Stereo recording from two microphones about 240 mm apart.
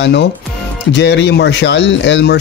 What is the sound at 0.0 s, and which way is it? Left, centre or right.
Speech, left.